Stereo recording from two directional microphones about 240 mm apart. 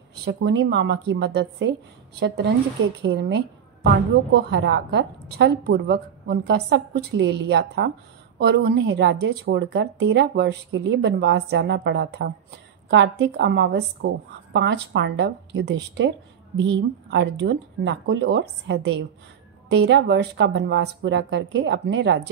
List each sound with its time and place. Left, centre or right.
0.2 s a woman's voice: right